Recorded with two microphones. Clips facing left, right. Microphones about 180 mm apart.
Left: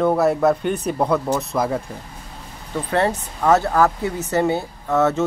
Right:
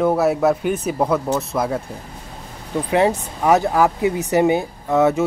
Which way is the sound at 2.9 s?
10° right (ahead or behind).